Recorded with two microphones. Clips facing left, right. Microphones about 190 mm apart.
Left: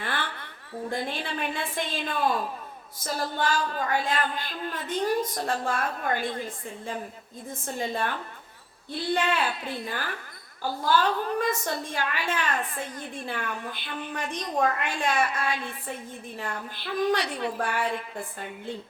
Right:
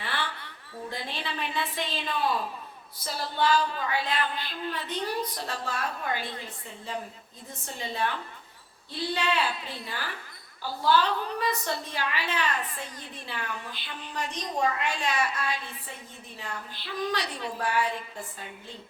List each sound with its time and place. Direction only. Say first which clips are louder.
0.0 s a sound: left 2 dB; 50° left (ahead or behind)
0.9 s a woman's voice: left 5 dB; 50° left (ahead or behind)
7.8 s a woman's voice: left 1 dB; 50° left (ahead or behind)